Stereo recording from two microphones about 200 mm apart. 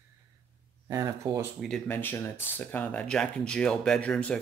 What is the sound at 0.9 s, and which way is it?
Speech, 15° right (ahead or behind).